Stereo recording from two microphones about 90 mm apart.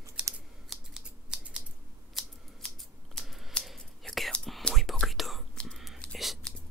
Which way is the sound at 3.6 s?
Centre (ahead or behind).